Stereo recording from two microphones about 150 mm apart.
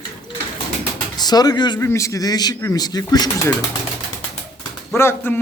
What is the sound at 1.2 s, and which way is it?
Speech, 25° left (ahead or behind).